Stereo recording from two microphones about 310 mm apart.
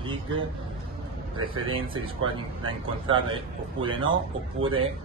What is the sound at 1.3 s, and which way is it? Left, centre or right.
Speech, centre.